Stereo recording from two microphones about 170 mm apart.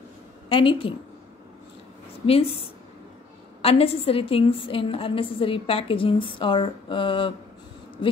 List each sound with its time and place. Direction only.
0.5 s a woman's voice: 30° left (ahead or behind)
2.2 s a woman's voice: 35° left (ahead or behind)
3.6 s a woman's voice: 35° left (ahead or behind)